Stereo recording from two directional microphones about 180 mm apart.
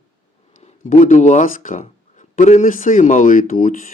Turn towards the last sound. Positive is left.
turn(degrees=45)  # may be behind; listen again after turning